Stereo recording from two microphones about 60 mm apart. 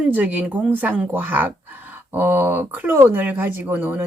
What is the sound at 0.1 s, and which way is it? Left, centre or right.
Speech, right.